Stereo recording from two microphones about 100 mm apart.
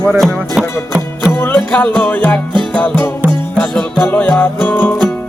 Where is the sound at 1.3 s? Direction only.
20° left (ahead or behind).